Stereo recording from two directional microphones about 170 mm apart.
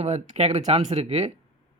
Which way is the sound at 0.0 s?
40° right (ahead or behind).